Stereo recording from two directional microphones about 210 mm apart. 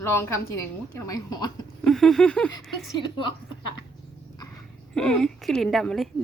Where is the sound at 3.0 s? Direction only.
20° left (ahead or behind).